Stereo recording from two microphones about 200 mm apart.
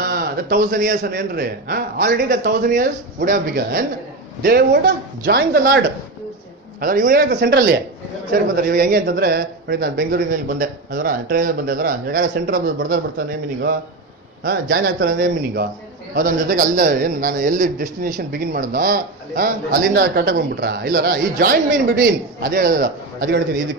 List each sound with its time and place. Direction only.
0.0 s a man's voice: 50° right (ahead or behind)
14.4 s a man's voice: 50° right (ahead or behind)